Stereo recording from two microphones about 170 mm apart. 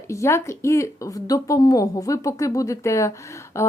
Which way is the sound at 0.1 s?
15° left (ahead or behind).